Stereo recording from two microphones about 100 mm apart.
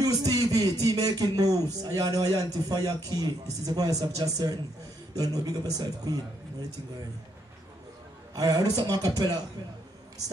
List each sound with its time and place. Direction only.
0.0 s speech: 35° right (ahead or behind)
8.4 s speech: 40° right (ahead or behind)